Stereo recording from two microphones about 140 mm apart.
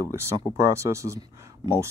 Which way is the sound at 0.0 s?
20° right (ahead or behind).